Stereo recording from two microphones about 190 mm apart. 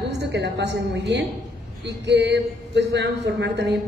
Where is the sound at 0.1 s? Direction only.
65° right (ahead or behind).